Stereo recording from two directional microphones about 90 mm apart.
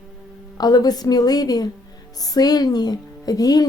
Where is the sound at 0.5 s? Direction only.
45° left (ahead or behind).